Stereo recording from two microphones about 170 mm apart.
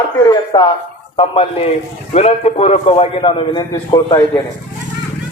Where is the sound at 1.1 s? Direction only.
35° left (ahead or behind).